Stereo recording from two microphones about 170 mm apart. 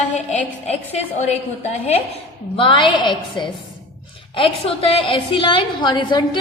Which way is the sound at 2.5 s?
30° left (ahead or behind).